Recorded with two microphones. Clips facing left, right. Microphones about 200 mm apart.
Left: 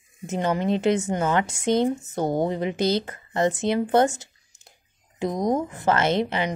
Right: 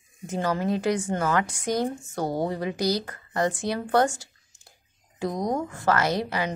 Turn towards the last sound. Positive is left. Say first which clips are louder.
# left 3 dB
turn(degrees=20)  # may be behind; listen again after turning